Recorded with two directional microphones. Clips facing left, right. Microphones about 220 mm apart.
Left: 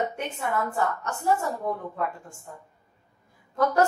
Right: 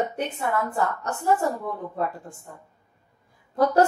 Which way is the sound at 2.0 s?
35° right (ahead or behind).